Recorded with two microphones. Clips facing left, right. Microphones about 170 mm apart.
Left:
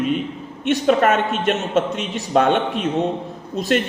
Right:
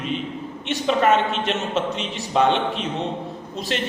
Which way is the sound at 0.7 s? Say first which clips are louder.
Left 3 dB; 50° left (ahead or behind).